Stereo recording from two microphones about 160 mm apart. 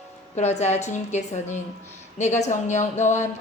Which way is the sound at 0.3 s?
45° left (ahead or behind).